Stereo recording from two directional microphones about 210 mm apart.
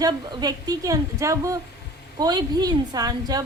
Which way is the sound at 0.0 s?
20° right (ahead or behind).